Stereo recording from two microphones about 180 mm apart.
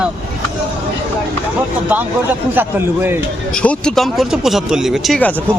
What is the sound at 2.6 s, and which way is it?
Speech, 10° right (ahead or behind).